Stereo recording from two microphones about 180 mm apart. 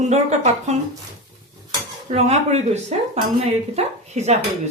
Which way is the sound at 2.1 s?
35° right (ahead or behind).